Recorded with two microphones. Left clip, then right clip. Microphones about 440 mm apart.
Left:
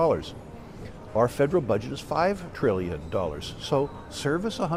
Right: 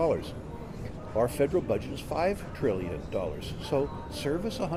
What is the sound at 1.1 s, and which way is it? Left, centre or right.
Speech, left.